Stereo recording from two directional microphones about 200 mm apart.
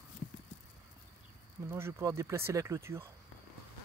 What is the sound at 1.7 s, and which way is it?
Speech, 10° right (ahead or behind).